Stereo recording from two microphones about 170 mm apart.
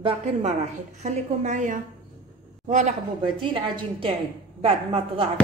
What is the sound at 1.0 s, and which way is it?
A woman's voice, 45° right (ahead or behind).